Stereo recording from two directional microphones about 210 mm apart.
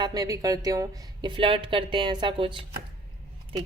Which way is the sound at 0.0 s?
20° right (ahead or behind).